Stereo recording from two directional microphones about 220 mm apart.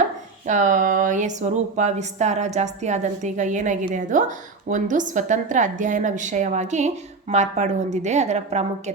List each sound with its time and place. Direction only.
0.4 s a woman's voice: 35° right (ahead or behind)